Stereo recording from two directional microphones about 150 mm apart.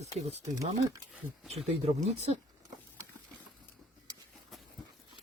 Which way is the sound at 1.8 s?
45° right (ahead or behind).